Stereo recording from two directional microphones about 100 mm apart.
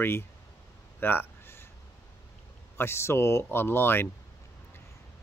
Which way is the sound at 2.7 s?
25° left (ahead or behind).